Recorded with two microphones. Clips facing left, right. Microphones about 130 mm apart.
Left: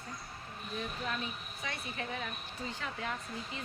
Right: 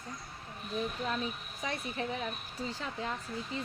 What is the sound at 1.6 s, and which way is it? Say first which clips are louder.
Speech: right 5 dB; 30° right (ahead or behind).